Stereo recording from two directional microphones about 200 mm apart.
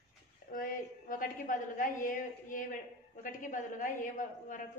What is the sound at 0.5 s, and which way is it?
A woman's voice, 45° left (ahead or behind).